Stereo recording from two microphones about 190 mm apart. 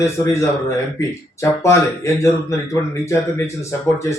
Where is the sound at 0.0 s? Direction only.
15° left (ahead or behind).